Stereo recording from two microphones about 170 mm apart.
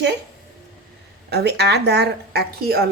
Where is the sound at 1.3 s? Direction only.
75° right (ahead or behind).